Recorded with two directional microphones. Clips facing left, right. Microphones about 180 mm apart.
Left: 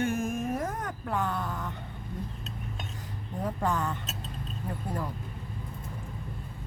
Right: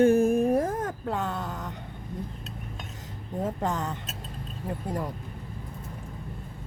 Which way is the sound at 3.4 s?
20° right (ahead or behind).